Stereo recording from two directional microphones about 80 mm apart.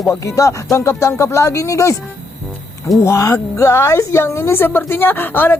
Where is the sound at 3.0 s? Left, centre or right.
Left.